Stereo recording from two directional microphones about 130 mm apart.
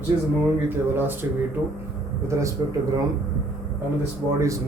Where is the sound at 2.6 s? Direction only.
30° right (ahead or behind).